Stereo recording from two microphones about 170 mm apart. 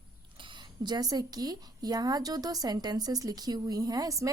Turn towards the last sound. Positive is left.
turn(degrees=-20)  # may be behind; listen again after turning